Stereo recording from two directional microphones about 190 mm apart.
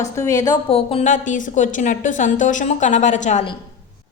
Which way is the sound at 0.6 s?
30° left (ahead or behind).